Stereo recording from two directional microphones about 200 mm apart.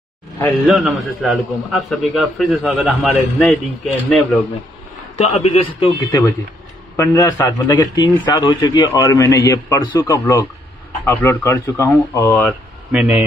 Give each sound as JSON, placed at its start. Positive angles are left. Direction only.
{"t": 0.7, "sound": "a man's voice", "side_deg": -5}
{"t": 5.1, "sound": "a man's voice", "side_deg": 30}
{"t": 12.9, "sound": "a man's voice", "side_deg": -5}